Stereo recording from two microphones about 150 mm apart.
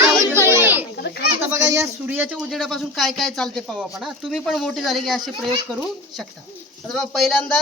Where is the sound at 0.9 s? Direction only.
90° left.